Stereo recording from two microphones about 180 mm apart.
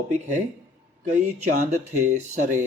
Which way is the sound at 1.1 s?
40° right (ahead or behind).